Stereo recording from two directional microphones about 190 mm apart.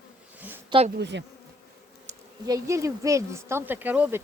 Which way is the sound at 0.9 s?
65° right (ahead or behind).